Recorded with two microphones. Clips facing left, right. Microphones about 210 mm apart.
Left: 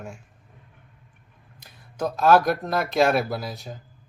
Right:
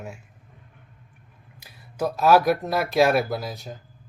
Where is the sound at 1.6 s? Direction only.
5° right (ahead or behind).